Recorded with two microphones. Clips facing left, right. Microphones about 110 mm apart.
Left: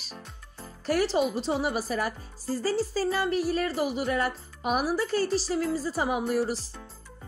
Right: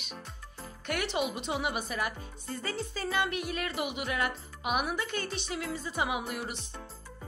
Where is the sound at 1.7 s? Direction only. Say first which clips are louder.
Left 5 dB; 40° left (ahead or behind).